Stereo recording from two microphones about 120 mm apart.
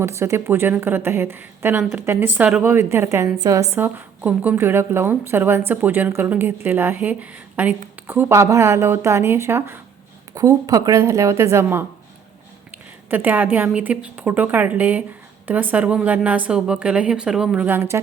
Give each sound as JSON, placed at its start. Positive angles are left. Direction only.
{"t": 0.0, "sound": "a woman's voice", "side_deg": -25}
{"t": 3.8, "sound": "a woman's voice", "side_deg": -15}
{"t": 13.1, "sound": "speech", "side_deg": -15}
{"t": 17.7, "sound": "a woman's voice", "side_deg": -20}